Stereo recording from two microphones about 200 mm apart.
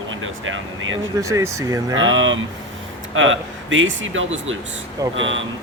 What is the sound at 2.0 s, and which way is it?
Speech, 75° right (ahead or behind).